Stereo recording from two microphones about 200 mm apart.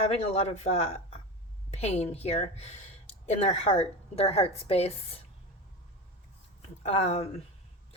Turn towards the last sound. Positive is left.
turn(degrees=30)  # may be behind; listen again after turning